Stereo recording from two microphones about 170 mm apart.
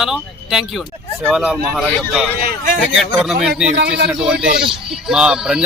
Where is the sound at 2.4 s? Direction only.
60° right (ahead or behind).